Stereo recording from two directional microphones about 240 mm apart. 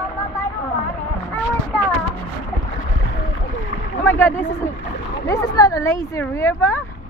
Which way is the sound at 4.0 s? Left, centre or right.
Centre.